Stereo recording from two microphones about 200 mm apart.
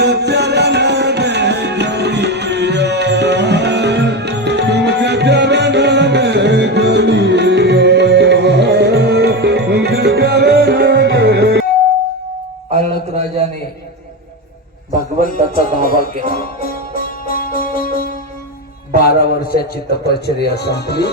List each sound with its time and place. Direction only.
0.0 s music: 55° right (ahead or behind)
15.2 s music: 45° left (ahead or behind)
20.1 s speech: 55° left (ahead or behind)